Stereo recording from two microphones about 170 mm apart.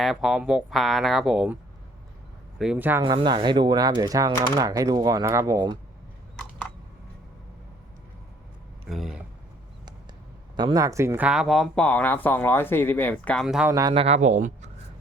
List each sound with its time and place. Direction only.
0.0 s speech: centre (ahead or behind)
2.6 s speech: 5° right (ahead or behind)
3.0 s speech: 25° right (ahead or behind)
8.9 s speech: centre (ahead or behind)
10.6 s speech: 25° right (ahead or behind)
11.3 s speech: centre (ahead or behind)
13.7 s speech: 20° right (ahead or behind)
13.9 s speech: 35° right (ahead or behind)